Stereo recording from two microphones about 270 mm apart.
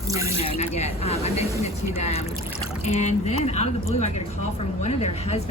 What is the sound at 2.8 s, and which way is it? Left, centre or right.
Speech, left.